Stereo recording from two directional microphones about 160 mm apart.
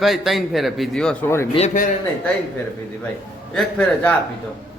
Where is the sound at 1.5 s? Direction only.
45° left (ahead or behind).